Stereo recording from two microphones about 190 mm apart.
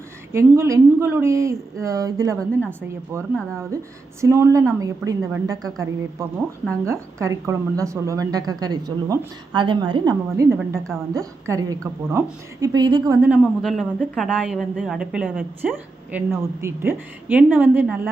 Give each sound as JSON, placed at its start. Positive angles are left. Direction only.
{"t": 0.3, "sound": "a woman's voice", "side_deg": -15}
{"t": 2.4, "sound": "a woman's voice", "side_deg": 5}
{"t": 3.5, "sound": "a woman's voice", "side_deg": -15}
{"t": 13.2, "sound": "a man's voice", "side_deg": -5}